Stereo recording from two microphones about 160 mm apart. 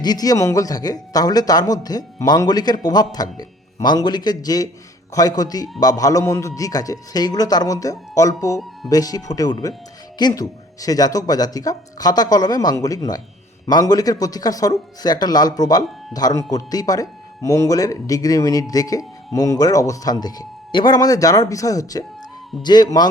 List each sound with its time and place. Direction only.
0.0 s speech: 25° left (ahead or behind)